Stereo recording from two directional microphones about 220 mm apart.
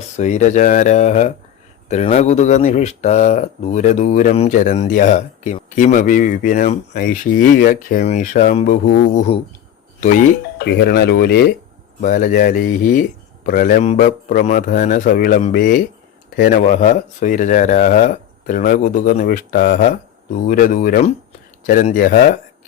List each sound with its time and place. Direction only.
0.2 s speech: 35° left (ahead or behind)
10.6 s speech: 45° left (ahead or behind)